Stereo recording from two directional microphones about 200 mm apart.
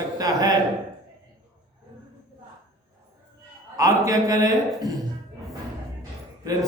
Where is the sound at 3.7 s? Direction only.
15° right (ahead or behind).